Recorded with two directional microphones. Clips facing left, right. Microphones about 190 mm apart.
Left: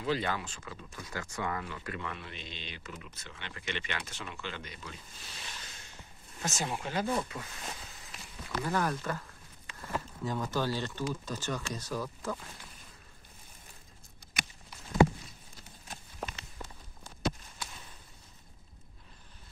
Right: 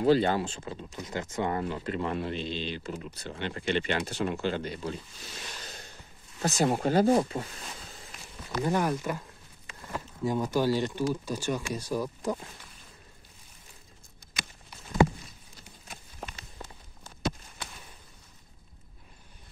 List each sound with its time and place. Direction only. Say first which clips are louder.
0.0 s speech: right 9 dB; 30° right (ahead or behind)
1.5 s speech: right 7 dB; 35° right (ahead or behind)
8.6 s speech: right 4 dB; 15° right (ahead or behind)
10.2 s speech: right 7 dB; 10° right (ahead or behind)